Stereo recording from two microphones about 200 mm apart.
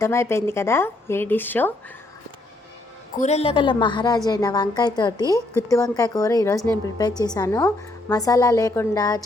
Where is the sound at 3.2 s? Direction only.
30° left (ahead or behind).